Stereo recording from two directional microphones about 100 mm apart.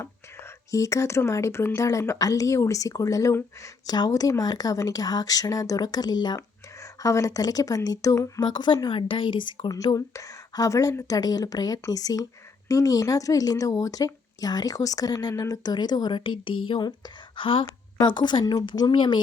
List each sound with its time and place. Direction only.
0.0 s speech: 30° left (ahead or behind)
7.0 s speech: 30° left (ahead or behind)
8.4 s speech: 45° left (ahead or behind)
9.6 s a woman's voice: 35° left (ahead or behind); by 19.2 s 55° left (ahead or behind)